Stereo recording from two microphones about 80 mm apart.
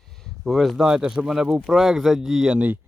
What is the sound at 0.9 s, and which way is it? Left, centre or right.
Speech, centre.